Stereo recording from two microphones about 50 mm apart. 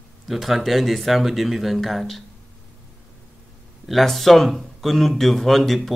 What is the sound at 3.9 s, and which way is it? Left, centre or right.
Speech, centre.